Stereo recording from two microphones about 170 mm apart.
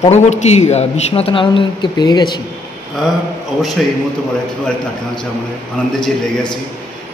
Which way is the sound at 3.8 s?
Centre (ahead or behind).